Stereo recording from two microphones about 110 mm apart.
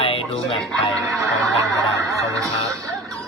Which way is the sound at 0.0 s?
65° left (ahead or behind).